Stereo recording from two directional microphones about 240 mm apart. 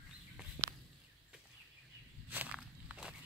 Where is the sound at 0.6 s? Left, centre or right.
Centre.